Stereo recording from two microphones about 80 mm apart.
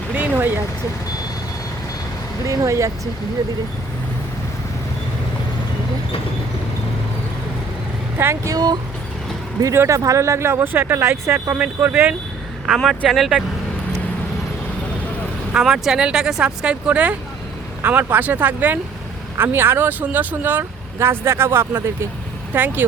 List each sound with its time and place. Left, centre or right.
0.1 s vehicle: centre
2.5 s speech: right
8.4 s speech: right
9.7 s speech: right
12.6 s speech: centre
15.5 s speech: centre; by 22.9 s right